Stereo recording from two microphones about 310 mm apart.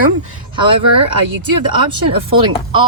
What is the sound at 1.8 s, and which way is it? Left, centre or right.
Speech, centre.